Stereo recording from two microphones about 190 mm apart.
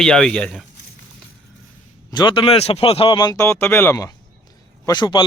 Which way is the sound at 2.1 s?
25° left (ahead or behind).